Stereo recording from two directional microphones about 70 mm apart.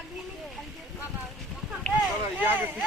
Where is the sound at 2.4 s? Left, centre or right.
Right.